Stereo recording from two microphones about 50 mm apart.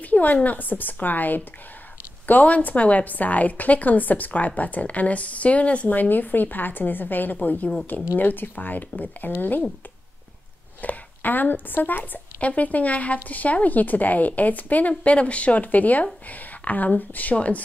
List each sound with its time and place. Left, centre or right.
0.0 s a woman's voice: left
10.8 s a woman's voice: left